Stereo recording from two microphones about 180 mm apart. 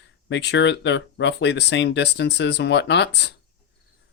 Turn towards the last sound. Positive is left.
turn(degrees=70)  # may be behind; listen again after turning